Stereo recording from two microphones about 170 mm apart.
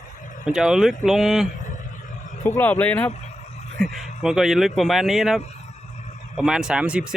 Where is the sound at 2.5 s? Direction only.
10° left (ahead or behind).